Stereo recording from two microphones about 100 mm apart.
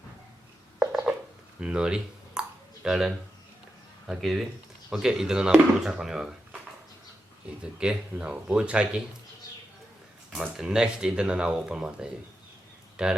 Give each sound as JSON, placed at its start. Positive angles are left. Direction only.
{"t": 0.8, "sound": "a sound", "side_deg": -5}
{"t": 1.6, "sound": "speech", "side_deg": -10}
{"t": 7.6, "sound": "speech", "side_deg": -10}
{"t": 10.3, "sound": "speech", "side_deg": -5}